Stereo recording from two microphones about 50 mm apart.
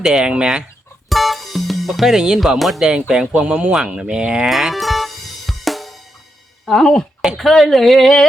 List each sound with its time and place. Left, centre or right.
0.0 s speech: centre
1.1 s music: centre
2.1 s speech: centre
2.8 s speech: centre
4.4 s music: centre
6.7 s speech: centre